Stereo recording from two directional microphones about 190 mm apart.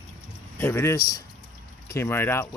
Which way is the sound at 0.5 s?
10° left (ahead or behind).